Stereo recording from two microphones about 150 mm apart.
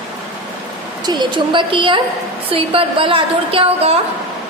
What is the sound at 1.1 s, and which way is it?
A woman's voice, 30° right (ahead or behind).